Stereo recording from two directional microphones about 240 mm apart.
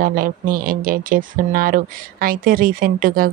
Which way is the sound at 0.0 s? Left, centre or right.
Right.